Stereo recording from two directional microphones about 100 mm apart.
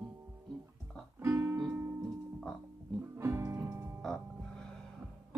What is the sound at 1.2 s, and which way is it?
Music, 25° right (ahead or behind).